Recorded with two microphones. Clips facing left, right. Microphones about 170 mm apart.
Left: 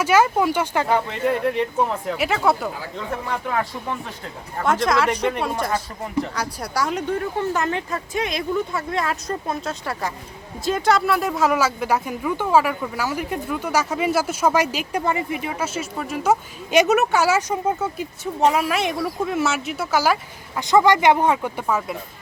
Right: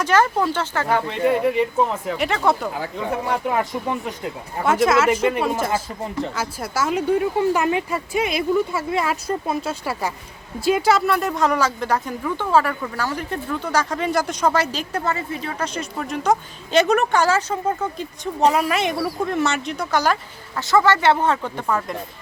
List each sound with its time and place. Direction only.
0.0 s speech: 10° left (ahead or behind)
1.0 s speech: centre (ahead or behind)
3.3 s speech: 20° right (ahead or behind)
4.5 s speech: 5° right (ahead or behind)
20.6 s speech: 15° left (ahead or behind)